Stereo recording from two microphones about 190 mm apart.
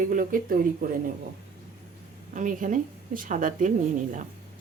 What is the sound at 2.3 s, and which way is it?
A woman's voice, 40° right (ahead or behind).